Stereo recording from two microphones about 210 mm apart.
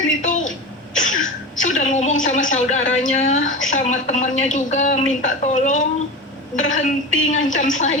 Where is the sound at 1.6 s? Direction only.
35° left (ahead or behind).